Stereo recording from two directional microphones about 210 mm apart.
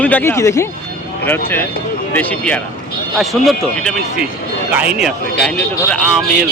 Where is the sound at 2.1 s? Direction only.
5° left (ahead or behind).